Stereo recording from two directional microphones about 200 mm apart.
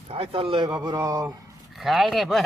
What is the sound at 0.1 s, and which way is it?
A man's voice, 25° right (ahead or behind).